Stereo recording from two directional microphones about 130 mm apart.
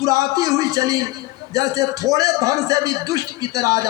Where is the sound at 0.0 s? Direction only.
25° right (ahead or behind).